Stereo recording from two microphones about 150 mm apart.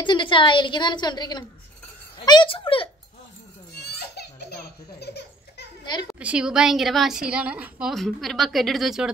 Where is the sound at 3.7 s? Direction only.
90° left.